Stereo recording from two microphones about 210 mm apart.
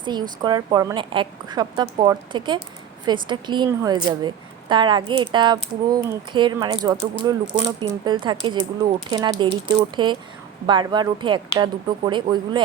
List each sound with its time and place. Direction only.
0.0 s a woman's voice: 20° right (ahead or behind)